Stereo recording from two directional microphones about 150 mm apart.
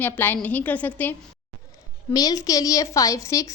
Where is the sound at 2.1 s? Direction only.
25° left (ahead or behind).